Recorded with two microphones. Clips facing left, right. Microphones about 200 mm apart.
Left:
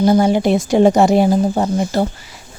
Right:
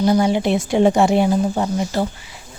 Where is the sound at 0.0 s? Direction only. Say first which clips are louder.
Left 3 dB; 50° left (ahead or behind).